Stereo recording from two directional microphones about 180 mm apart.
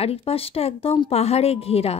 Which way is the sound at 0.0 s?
35° left (ahead or behind).